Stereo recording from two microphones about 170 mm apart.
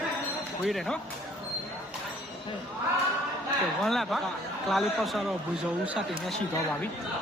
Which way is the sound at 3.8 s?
Centre (ahead or behind).